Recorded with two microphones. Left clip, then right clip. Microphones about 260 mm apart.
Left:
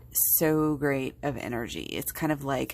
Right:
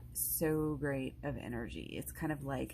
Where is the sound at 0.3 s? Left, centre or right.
Left.